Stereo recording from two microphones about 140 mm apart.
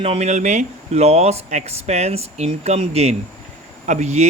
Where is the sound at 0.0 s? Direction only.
50° right (ahead or behind).